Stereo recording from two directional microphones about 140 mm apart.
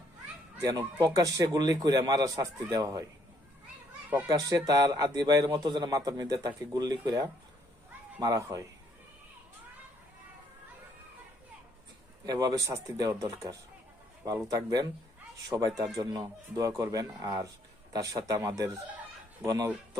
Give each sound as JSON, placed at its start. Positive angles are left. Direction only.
{"t": 0.6, "sound": "a man's voice", "side_deg": -25}
{"t": 4.3, "sound": "a man's voice", "side_deg": -30}
{"t": 12.2, "sound": "a man's voice", "side_deg": -30}